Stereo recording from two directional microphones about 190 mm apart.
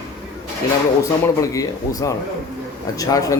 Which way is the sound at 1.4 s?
20° left (ahead or behind).